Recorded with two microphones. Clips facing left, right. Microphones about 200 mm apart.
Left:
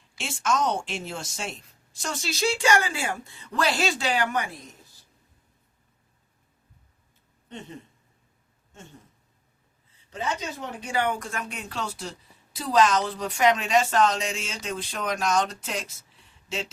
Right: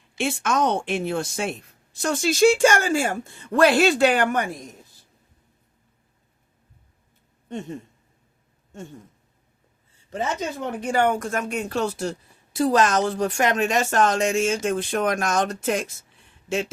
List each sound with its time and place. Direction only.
0.2 s a woman's voice: 60° right (ahead or behind)
10.1 s a woman's voice: 50° right (ahead or behind)
16.3 s a sound: 55° right (ahead or behind)